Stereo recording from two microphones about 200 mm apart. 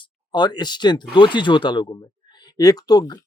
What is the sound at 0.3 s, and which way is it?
Speech, 20° left (ahead or behind).